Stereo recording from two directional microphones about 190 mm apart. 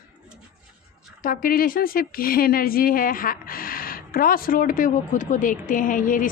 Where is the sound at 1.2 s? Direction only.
45° left (ahead or behind).